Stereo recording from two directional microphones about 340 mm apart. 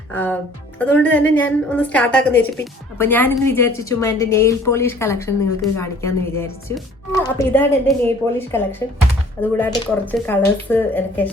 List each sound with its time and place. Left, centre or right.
0.1 s a woman's voice: centre